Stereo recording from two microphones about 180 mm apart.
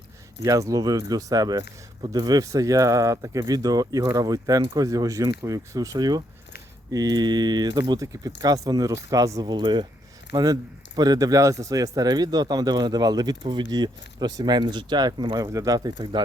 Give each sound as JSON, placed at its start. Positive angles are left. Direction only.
{"t": 0.4, "sound": "speech", "side_deg": -20}